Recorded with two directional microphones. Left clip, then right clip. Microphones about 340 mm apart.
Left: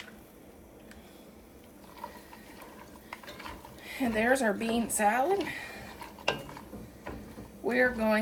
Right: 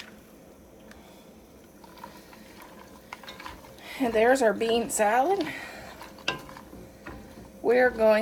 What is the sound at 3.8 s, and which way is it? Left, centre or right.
Speech, right.